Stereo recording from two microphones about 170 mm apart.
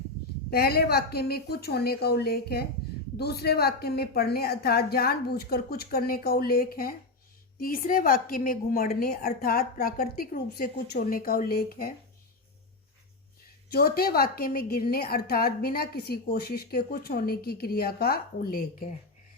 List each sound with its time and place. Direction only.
0.5 s a woman's voice: 65° left (ahead or behind)
13.7 s a woman's voice: 65° left (ahead or behind)